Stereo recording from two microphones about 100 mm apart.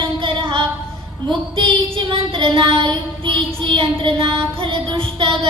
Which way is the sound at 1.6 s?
60° right (ahead or behind).